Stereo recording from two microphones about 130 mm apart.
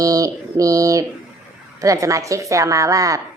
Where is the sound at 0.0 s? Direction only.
25° right (ahead or behind).